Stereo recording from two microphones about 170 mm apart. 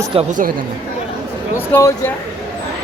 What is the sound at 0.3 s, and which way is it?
Speech, 50° right (ahead or behind).